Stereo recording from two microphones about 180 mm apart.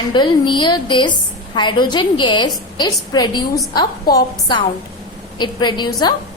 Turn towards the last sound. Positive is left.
turn(degrees=25)  # may be behind; listen again after turning